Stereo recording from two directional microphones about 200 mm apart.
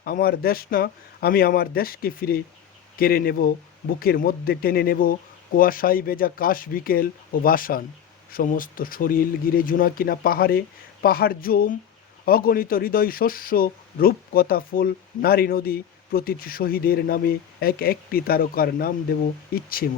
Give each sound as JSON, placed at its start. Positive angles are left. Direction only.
{"t": 0.0, "sound": "speech", "side_deg": 50}